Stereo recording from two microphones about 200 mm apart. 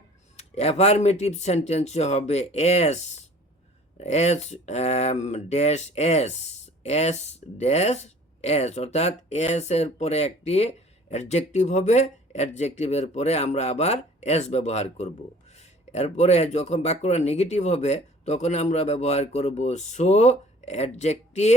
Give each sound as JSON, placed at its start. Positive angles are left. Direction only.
{"t": 0.3, "sound": "speech", "side_deg": 30}